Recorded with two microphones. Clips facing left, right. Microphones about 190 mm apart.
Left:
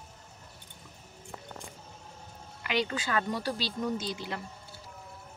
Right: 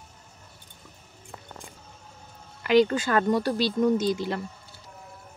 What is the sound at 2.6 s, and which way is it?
Speech, 45° right (ahead or behind).